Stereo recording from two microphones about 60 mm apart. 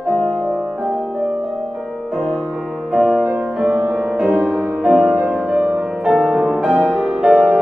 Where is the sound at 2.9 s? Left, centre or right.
Centre.